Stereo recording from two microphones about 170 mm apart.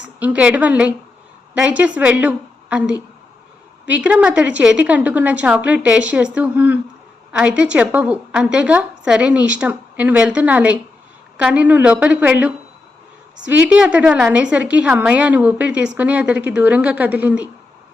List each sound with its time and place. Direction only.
0.2 s a woman's voice: 10° right (ahead or behind)